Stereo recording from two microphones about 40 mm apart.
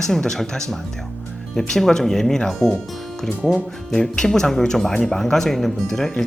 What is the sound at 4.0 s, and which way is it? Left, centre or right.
Speech, centre.